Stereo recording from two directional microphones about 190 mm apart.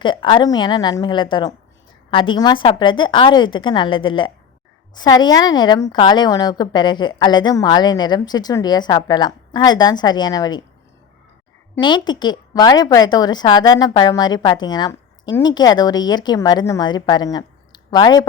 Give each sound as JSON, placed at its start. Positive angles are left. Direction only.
{"t": 0.0, "sound": "a woman's voice", "side_deg": 25}
{"t": 11.8, "sound": "a woman's voice", "side_deg": 25}